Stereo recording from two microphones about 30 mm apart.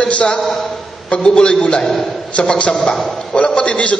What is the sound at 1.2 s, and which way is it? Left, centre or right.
A man's voice, left.